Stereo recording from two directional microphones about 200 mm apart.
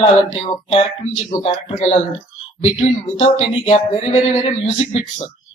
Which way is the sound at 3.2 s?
30° left (ahead or behind).